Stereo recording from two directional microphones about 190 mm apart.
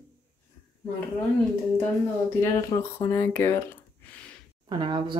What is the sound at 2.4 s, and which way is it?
Speech, 15° left (ahead or behind).